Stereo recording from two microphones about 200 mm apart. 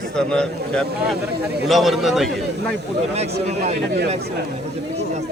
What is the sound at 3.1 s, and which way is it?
Speech, 30° right (ahead or behind).